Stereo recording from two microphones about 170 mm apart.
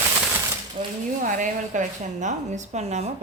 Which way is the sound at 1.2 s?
50° right (ahead or behind).